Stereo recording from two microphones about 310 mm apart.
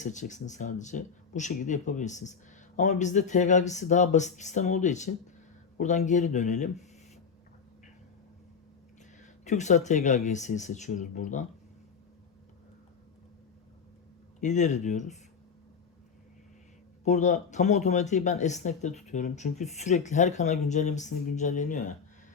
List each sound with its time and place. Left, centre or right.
0.0 s speech: left
9.4 s speech: left
14.4 s speech: left
17.0 s speech: left